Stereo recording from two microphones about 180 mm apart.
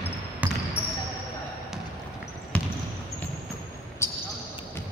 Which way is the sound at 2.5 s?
5° left (ahead or behind).